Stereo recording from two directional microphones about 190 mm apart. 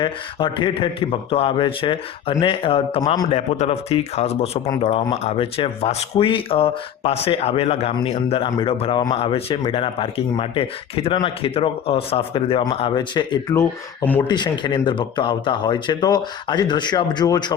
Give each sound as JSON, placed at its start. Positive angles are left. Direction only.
{"t": 0.0, "sound": "speech", "side_deg": 25}
{"t": 3.2, "sound": "speech", "side_deg": 35}
{"t": 14.3, "sound": "speech", "side_deg": 25}